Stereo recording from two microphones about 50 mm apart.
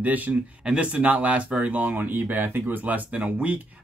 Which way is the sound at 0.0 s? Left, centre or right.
Right.